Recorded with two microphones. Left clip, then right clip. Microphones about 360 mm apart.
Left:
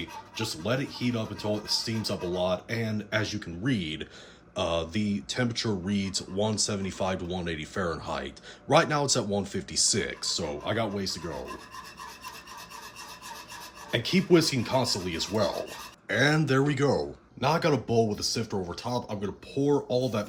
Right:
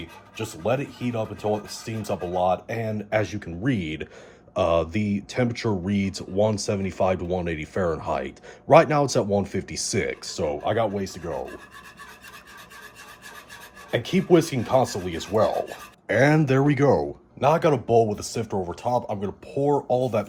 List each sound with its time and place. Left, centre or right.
0.3 s speech: centre
13.9 s speech: centre